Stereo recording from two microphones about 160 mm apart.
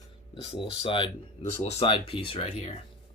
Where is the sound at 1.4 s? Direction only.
45° left (ahead or behind).